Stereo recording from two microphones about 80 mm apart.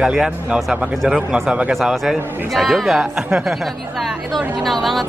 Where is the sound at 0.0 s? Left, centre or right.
Centre.